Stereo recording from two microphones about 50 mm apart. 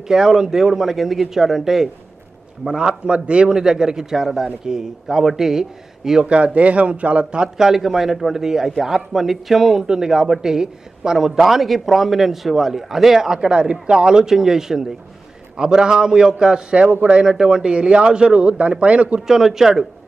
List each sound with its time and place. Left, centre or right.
0.1 s speech: centre
3.4 s speech: centre
6.2 s speech: right
7.4 s speech: centre
16.8 s speech: right
19.2 s speech: centre